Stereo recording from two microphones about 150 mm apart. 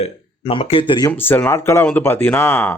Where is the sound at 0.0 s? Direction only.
40° left (ahead or behind).